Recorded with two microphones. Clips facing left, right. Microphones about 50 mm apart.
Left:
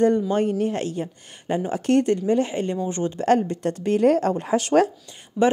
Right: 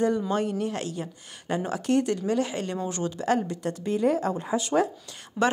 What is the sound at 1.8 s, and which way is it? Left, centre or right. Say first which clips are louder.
Speech: left 6 dB; left.